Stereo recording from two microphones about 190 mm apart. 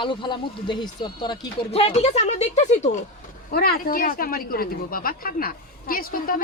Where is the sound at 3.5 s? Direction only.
55° left (ahead or behind).